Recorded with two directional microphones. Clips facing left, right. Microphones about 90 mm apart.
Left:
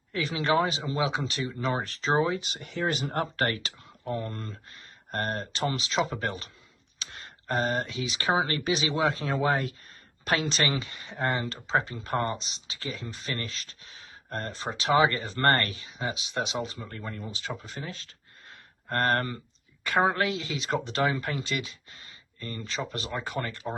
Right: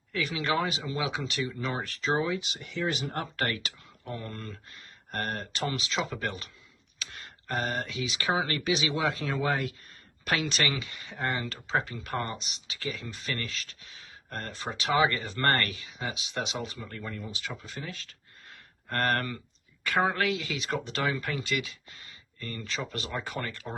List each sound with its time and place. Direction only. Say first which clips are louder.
0.1 s speech: left 3 dB; 30° left (ahead or behind)